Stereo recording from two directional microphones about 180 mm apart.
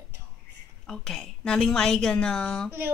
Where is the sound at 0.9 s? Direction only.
5° left (ahead or behind).